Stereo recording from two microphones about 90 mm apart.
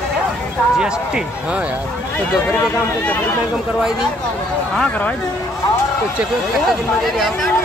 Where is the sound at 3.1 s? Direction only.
20° left (ahead or behind).